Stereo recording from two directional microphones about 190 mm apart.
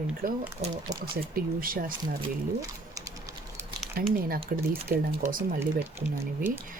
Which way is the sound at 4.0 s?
50° right (ahead or behind).